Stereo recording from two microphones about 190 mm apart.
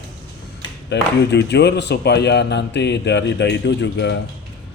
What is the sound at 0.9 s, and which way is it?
Speech, 65° left (ahead or behind).